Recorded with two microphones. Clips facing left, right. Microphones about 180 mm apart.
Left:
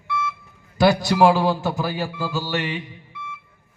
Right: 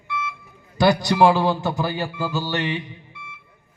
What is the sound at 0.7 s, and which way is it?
A man's voice, 5° left (ahead or behind).